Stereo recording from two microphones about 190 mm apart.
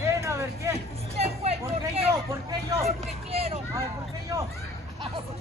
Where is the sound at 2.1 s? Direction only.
15° right (ahead or behind).